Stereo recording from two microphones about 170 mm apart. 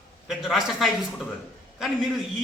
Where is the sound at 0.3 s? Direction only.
Centre (ahead or behind).